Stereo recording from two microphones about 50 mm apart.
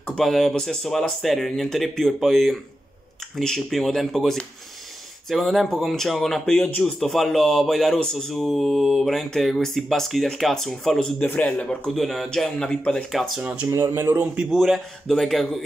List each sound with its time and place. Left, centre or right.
0.2 s a man's voice: centre
11.5 s a man's voice: centre
11.9 s speech: centre
13.4 s speech: right
13.7 s speech: right
14.5 s a man's voice: centre